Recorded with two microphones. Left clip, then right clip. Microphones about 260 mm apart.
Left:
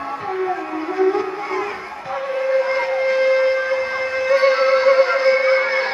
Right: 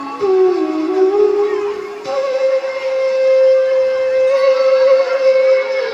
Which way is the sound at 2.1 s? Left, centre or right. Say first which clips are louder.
Right 4 dB; right.